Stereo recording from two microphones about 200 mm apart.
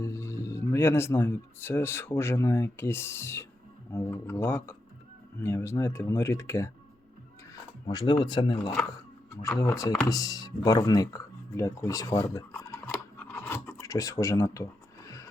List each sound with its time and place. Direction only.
0.0 s speech: 15° left (ahead or behind)
12.2 s scissors: 10° left (ahead or behind)